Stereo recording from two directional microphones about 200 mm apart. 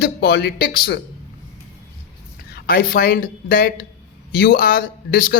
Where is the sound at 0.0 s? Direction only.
55° left (ahead or behind).